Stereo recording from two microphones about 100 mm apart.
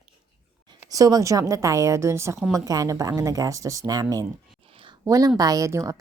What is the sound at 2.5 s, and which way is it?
A woman's voice, 40° right (ahead or behind).